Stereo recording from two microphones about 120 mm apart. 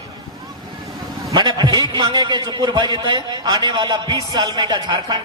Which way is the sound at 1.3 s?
35° right (ahead or behind).